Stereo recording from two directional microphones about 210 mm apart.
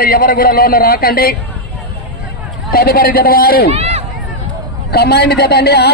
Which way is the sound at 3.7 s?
30° right (ahead or behind).